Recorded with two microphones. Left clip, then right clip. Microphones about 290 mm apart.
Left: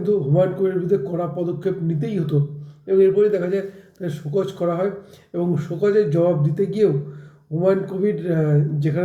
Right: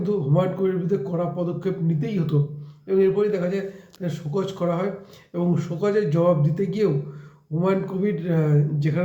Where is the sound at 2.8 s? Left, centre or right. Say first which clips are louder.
Left 4 dB; centre.